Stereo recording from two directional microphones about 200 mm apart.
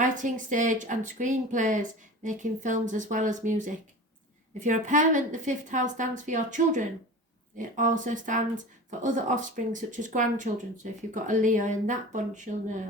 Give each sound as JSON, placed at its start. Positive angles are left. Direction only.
{"t": 0.0, "sound": "speech", "side_deg": -40}